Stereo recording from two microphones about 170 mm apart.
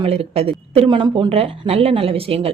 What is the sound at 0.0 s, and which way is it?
Speech, 35° right (ahead or behind).